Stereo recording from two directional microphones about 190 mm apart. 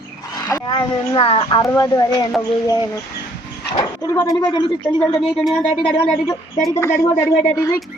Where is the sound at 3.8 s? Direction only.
15° left (ahead or behind).